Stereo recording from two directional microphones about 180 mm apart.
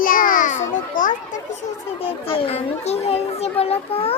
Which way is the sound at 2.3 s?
30° left (ahead or behind).